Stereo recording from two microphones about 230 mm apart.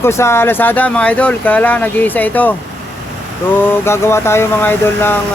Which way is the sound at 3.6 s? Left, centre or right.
Centre.